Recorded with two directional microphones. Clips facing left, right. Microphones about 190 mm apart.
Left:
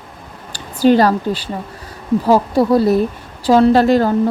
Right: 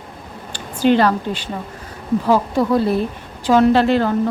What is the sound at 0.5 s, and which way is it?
A woman's voice, 40° left (ahead or behind).